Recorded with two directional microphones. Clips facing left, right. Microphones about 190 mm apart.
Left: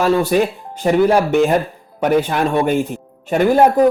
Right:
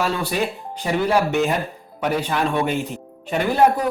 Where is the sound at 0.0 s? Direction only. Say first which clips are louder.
Left 8 dB; 45° left (ahead or behind).